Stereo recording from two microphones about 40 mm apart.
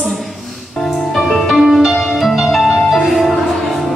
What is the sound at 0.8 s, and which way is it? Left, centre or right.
Music, centre.